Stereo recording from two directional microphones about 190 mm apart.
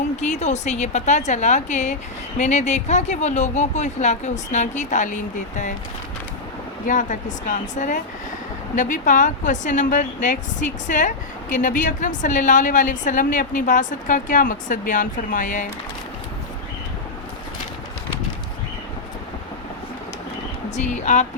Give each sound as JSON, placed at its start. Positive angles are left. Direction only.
{"t": 0.2, "sound": "speech", "side_deg": 40}
{"t": 6.8, "sound": "a woman's voice", "side_deg": 40}
{"t": 20.7, "sound": "speech", "side_deg": 35}